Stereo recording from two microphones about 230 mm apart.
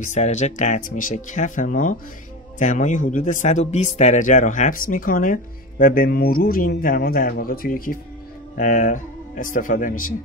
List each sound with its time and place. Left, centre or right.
0.1 s speech: left